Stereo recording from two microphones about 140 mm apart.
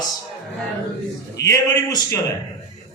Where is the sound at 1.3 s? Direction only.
25° left (ahead or behind).